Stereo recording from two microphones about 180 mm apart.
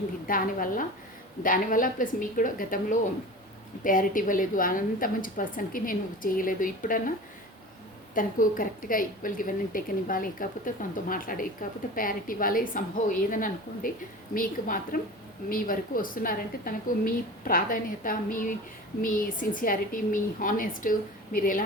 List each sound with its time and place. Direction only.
0.3 s a woman's voice: 50° left (ahead or behind)
8.1 s a woman's voice: 50° left (ahead or behind)